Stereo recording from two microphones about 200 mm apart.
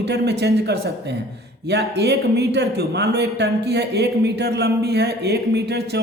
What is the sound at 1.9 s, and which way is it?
Speech, 55° right (ahead or behind).